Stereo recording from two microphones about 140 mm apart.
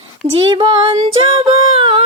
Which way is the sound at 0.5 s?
35° right (ahead or behind).